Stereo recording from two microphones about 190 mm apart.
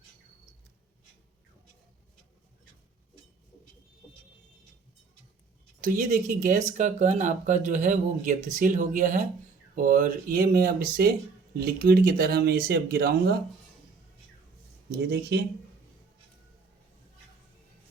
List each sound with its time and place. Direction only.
5.8 s speech: 45° right (ahead or behind)
14.8 s speech: 60° right (ahead or behind)